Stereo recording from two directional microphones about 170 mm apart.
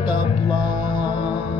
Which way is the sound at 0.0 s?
25° left (ahead or behind).